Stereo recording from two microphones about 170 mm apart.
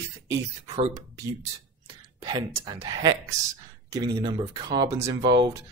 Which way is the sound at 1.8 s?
25° right (ahead or behind).